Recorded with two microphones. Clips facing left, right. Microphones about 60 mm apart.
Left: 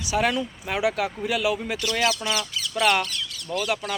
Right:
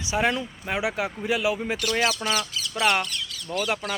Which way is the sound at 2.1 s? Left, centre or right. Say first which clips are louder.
Right 1 dB; centre.